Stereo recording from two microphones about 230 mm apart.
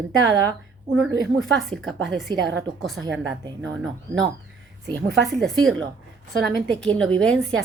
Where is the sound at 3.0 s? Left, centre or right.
Right.